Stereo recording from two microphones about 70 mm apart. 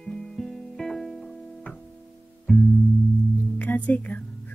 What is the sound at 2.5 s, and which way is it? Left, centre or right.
Music, centre.